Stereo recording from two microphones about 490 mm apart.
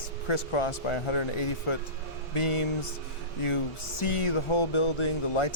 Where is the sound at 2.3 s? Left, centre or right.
Left.